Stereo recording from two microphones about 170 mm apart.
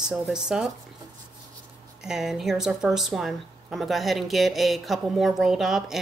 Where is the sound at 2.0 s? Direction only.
Centre (ahead or behind).